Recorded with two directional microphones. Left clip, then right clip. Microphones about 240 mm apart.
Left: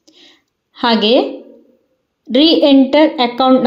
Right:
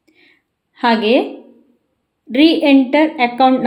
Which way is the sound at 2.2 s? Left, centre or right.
Centre.